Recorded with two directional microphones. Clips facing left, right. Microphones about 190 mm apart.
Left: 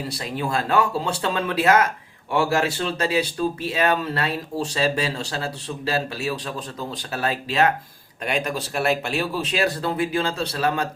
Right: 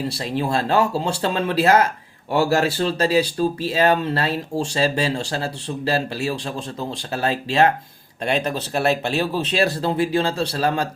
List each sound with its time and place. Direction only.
0.2 s speech: 30° right (ahead or behind)